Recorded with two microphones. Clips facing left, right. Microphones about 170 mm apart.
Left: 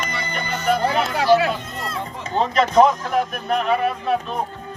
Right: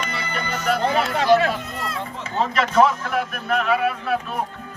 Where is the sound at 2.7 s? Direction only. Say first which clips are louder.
Left 2 dB; 35° left (ahead or behind).